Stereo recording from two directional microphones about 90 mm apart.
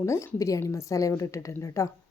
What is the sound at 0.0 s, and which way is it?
A woman's voice, 35° left (ahead or behind).